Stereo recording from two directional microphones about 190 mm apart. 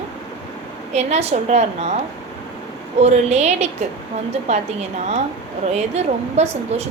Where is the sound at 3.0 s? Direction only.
35° right (ahead or behind).